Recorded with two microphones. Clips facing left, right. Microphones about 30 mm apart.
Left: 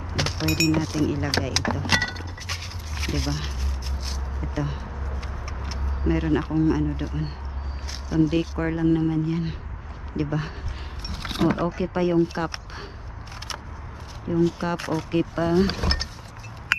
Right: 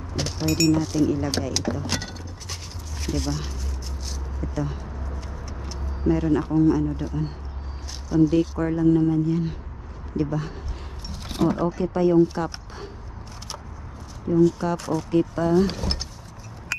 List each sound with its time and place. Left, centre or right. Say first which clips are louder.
0.1 s a sound: even; left
0.8 s speech: right 2 dB; centre
4.0 s a sound: right 2 dB; left
5.7 s speech: right 3 dB; left
11.1 s speech: even; left
14.3 s speech: right 3 dB; left